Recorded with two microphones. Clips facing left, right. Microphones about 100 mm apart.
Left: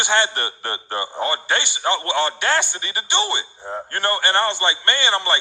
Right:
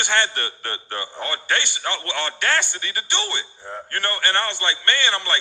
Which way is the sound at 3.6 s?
25° left (ahead or behind).